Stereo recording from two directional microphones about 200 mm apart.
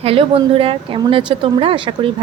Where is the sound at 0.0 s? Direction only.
30° right (ahead or behind).